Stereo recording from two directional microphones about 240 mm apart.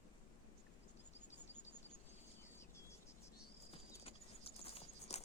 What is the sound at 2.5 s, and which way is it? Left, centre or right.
Cricket, centre.